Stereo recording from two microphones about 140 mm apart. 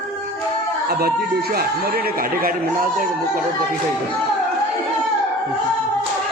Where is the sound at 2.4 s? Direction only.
90° right.